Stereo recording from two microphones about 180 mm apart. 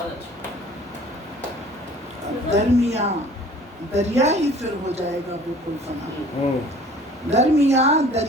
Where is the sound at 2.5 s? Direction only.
35° right (ahead or behind).